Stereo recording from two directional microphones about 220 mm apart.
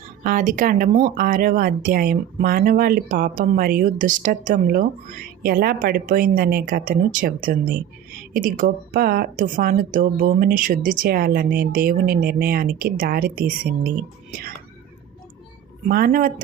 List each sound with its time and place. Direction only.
0.3 s speech: 35° right (ahead or behind)
15.9 s speech: 40° right (ahead or behind)